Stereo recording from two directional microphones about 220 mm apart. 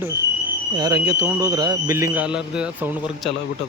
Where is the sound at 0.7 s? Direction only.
15° right (ahead or behind).